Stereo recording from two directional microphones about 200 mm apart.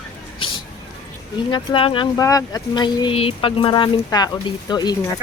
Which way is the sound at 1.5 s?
25° left (ahead or behind).